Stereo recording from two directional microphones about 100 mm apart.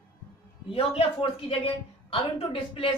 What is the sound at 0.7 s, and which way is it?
A woman's voice, 70° left (ahead or behind).